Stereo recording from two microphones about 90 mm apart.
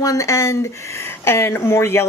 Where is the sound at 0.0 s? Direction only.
40° left (ahead or behind).